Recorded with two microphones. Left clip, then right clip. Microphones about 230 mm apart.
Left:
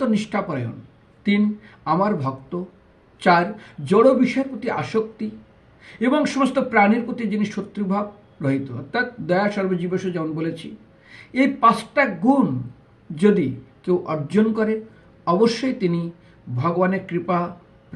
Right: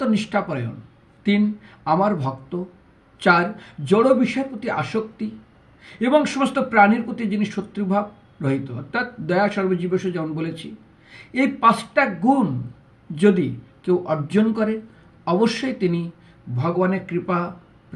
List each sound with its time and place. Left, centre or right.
0.0 s a man's voice: centre